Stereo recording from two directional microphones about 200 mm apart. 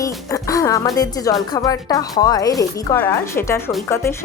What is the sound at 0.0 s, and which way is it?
Speech, 15° left (ahead or behind).